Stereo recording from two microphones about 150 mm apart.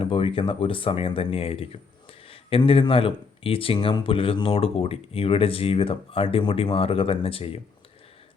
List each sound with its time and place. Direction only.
0.0 s speech: 35° left (ahead or behind)